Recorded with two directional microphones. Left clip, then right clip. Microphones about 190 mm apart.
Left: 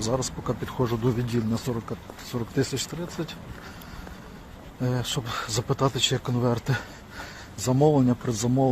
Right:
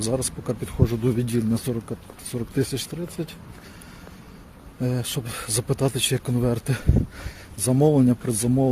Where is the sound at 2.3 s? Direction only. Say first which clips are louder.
Right 1 dB; 30° right (ahead or behind).